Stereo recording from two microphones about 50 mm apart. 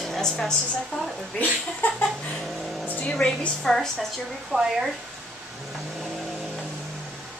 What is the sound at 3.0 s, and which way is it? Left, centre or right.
A woman's voice, left.